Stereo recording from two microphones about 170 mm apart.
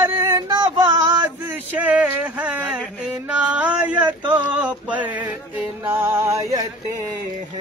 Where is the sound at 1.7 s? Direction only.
10° right (ahead or behind).